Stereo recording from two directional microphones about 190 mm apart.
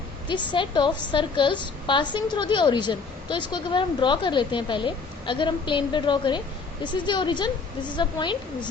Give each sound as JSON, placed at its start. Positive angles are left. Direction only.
{"t": 0.3, "sound": "a woman's voice", "side_deg": 25}